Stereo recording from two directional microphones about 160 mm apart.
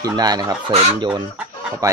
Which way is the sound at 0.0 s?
25° right (ahead or behind).